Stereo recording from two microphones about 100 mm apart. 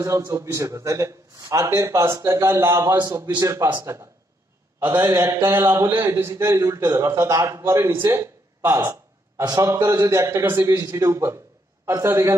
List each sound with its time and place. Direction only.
0.0 s a man's voice: 30° right (ahead or behind)
10.8 s a man's voice: 35° right (ahead or behind)